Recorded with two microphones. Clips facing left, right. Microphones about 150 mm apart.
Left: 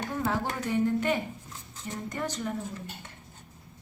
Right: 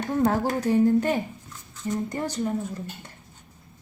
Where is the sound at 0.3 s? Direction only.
40° right (ahead or behind).